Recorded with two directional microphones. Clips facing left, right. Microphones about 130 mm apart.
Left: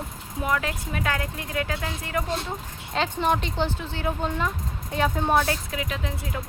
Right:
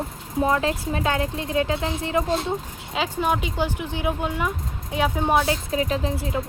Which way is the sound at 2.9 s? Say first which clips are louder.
Even; 5° right (ahead or behind).